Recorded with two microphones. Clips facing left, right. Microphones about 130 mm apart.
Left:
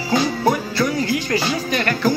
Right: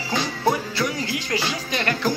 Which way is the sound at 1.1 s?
20° right (ahead or behind).